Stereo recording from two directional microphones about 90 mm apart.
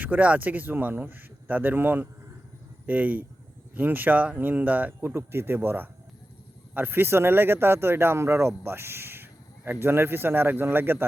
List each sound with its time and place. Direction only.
0.0 s speech: 15° right (ahead or behind)